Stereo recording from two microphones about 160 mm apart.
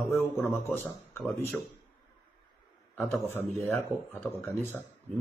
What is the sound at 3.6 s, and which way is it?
Speech, 15° left (ahead or behind).